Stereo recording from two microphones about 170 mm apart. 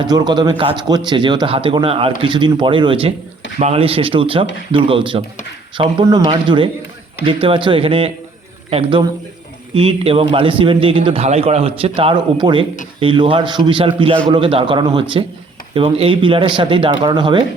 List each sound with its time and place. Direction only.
0.0 s a man's voice: 25° right (ahead or behind)